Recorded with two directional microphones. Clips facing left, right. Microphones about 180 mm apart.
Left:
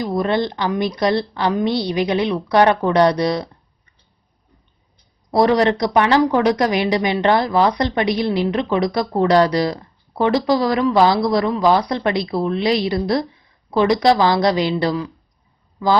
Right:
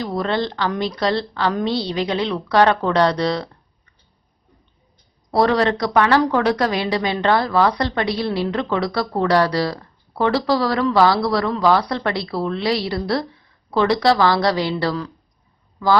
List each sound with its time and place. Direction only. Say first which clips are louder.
0.0 s speech: left 3 dB; 15° left (ahead or behind)
5.3 s speech: left 2 dB; 15° left (ahead or behind)